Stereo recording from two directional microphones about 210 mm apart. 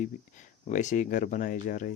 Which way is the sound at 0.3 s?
35° left (ahead or behind).